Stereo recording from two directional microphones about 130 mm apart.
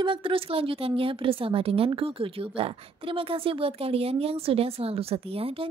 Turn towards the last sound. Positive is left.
turn(degrees=-45)  # may be behind; listen again after turning